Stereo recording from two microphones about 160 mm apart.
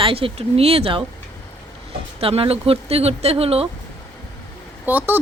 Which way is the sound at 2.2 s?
35° right (ahead or behind).